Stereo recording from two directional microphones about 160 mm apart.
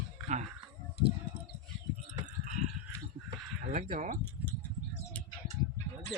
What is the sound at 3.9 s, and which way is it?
Speech, 55° right (ahead or behind).